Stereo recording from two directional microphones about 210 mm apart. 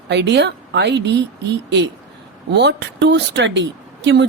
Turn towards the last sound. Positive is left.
turn(degrees=-55)  # may be behind; listen again after turning